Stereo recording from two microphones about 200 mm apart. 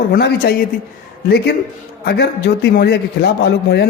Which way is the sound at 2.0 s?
55° left (ahead or behind).